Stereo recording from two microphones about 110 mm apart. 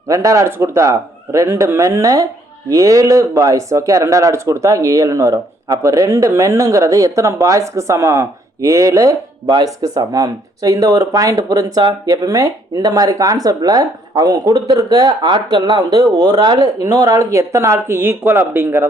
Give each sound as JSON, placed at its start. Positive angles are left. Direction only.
{"t": 0.1, "sound": "speech", "side_deg": -30}
{"t": 16.8, "sound": "speech", "side_deg": -35}